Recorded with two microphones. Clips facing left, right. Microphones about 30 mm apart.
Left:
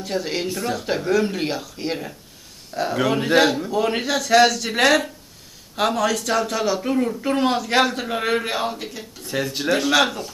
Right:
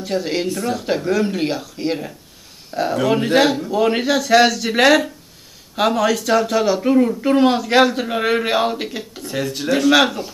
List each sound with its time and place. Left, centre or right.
0.0 s speech: centre
9.2 s speech: centre
9.8 s speech: centre